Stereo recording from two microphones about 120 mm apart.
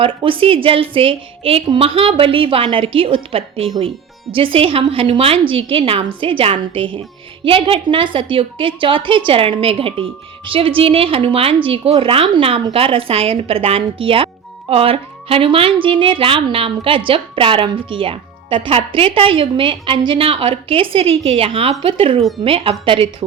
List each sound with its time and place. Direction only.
0.0 s speech: 45° right (ahead or behind)